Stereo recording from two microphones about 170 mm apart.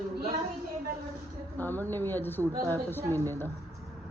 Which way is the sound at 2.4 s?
15° right (ahead or behind).